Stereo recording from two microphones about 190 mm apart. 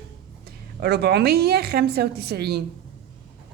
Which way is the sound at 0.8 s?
60° right (ahead or behind).